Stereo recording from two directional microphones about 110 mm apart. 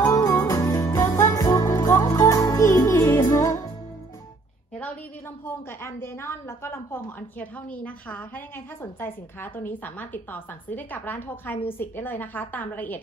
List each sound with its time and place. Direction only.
0.1 s music: 30° left (ahead or behind)
5.4 s a woman's voice: 20° left (ahead or behind)